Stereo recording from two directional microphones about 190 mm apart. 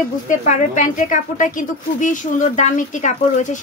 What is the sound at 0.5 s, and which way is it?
Speech, 40° left (ahead or behind).